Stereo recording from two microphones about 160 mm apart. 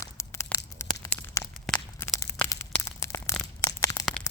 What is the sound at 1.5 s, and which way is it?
Walk, centre (ahead or behind).